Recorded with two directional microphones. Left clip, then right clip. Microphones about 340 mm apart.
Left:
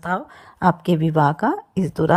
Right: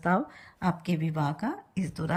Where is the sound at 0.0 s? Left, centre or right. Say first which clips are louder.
Left 3 dB; centre.